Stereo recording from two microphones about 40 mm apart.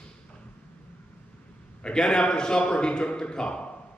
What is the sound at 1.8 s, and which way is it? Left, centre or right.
A man's voice, centre.